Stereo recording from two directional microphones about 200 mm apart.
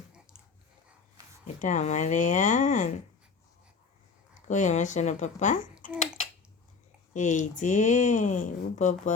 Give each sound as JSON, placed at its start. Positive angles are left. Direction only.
{"t": 1.6, "sound": "speech", "side_deg": 35}
{"t": 4.4, "sound": "speech", "side_deg": 35}
{"t": 5.8, "sound": "finger snapping", "side_deg": 40}
{"t": 7.1, "sound": "speech", "side_deg": 35}